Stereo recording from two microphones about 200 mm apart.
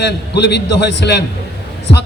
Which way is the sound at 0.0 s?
55° left (ahead or behind).